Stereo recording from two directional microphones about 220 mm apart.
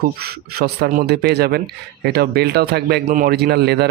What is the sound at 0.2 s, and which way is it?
A man's voice, 45° right (ahead or behind).